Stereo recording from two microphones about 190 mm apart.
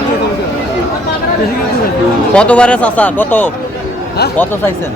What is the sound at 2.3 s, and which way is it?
A man's voice, 5° left (ahead or behind).